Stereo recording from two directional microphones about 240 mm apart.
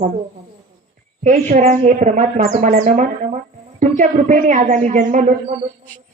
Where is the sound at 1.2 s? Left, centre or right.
Right.